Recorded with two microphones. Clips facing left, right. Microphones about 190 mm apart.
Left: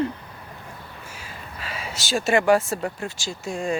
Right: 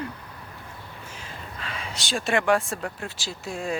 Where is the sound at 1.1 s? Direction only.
5° left (ahead or behind).